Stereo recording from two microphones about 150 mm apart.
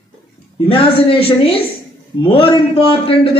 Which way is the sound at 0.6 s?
35° left (ahead or behind).